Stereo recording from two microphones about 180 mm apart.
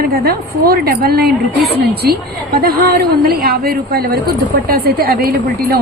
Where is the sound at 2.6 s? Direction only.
55° right (ahead or behind).